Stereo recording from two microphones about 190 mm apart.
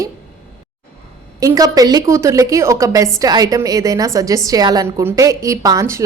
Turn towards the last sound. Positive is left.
turn(degrees=-15)  # may be behind; listen again after turning